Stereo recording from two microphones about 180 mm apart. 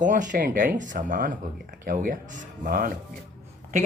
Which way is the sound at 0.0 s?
45° right (ahead or behind).